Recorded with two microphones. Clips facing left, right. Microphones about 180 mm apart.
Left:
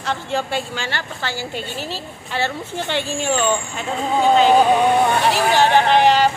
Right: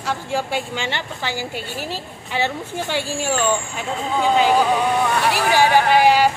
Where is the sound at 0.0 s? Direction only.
10° right (ahead or behind).